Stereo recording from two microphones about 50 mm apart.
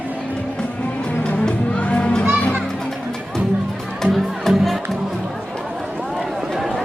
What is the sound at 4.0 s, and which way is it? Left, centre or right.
Music, centre.